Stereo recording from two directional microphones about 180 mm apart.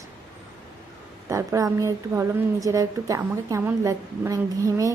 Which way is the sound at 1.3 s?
15° right (ahead or behind).